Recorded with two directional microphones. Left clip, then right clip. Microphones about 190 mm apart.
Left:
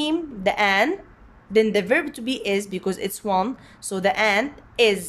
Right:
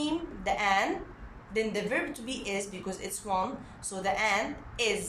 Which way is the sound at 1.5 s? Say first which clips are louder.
Left 12 dB; 50° left (ahead or behind).